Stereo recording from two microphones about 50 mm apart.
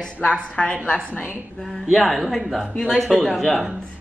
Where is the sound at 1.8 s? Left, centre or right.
Centre.